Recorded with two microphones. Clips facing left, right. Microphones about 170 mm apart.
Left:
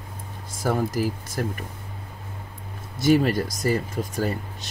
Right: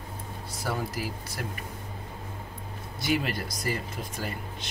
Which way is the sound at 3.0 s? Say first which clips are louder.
Left 9 dB; 45° left (ahead or behind).